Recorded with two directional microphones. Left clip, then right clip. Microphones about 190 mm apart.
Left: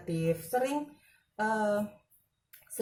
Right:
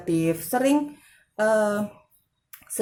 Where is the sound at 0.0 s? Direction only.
45° right (ahead or behind).